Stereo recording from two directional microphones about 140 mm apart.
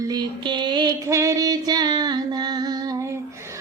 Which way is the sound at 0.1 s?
30° right (ahead or behind).